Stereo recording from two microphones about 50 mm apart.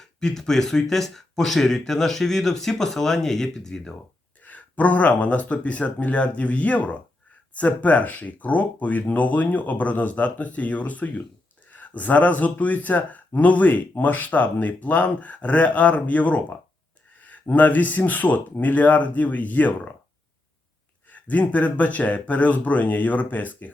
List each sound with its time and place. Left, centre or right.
0.0 s speech: centre
4.4 s speech: left
21.1 s speech: left